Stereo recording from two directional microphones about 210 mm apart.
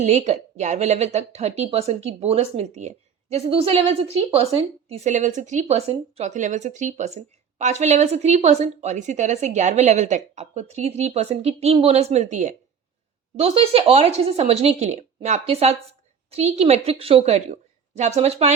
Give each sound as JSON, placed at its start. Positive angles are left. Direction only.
{"t": 0.0, "sound": "a woman's voice", "side_deg": -35}